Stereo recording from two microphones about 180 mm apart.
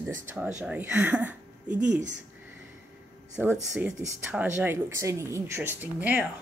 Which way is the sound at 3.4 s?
10° right (ahead or behind).